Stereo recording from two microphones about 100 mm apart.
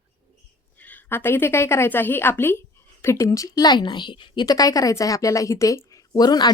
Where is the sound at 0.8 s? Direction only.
20° left (ahead or behind); by 4.4 s 50° left (ahead or behind).